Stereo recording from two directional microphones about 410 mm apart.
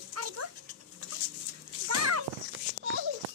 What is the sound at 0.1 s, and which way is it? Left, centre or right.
Dog, right.